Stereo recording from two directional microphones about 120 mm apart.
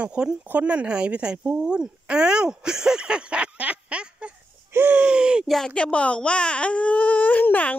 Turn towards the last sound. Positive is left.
turn(degrees=15)  # may be behind; listen again after turning